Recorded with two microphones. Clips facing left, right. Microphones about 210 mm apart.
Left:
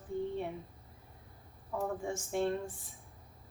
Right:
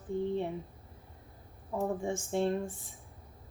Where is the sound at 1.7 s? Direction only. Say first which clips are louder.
Right 3 dB; 25° right (ahead or behind).